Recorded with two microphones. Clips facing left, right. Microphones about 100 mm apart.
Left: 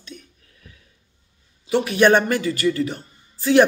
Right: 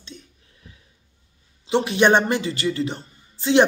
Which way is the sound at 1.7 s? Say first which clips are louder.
Left 1 dB; 25° right (ahead or behind).